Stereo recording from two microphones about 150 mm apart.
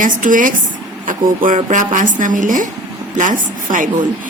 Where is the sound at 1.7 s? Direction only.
60° right (ahead or behind).